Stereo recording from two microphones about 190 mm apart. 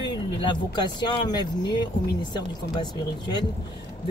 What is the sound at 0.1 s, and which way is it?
Speech, 25° left (ahead or behind).